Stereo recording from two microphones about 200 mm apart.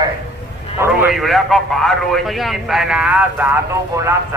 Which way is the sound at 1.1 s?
Centre (ahead or behind).